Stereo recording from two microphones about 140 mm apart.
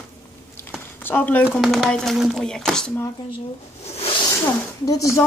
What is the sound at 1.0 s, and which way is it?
Speech, 15° left (ahead or behind).